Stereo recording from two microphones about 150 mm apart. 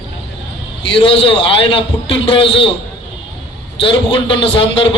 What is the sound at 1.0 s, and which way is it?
A man's voice, 40° left (ahead or behind).